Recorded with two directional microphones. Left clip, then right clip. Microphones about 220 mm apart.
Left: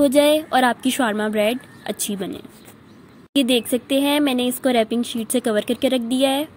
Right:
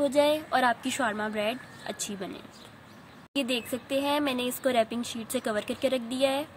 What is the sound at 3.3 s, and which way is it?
Speech, 35° left (ahead or behind).